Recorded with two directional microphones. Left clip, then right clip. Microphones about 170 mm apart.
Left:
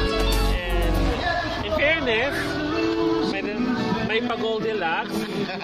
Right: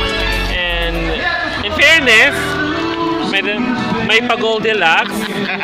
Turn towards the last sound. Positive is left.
turn(degrees=-10)  # may be behind; listen again after turning